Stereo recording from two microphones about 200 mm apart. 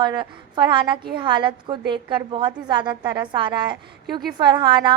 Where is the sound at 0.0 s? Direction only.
20° right (ahead or behind).